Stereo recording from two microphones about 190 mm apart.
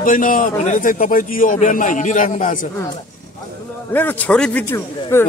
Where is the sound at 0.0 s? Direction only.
45° left (ahead or behind).